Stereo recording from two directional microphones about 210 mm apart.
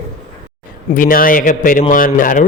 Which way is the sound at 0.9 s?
40° left (ahead or behind).